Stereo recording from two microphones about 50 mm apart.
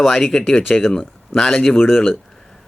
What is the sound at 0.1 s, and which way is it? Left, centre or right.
Speech, centre.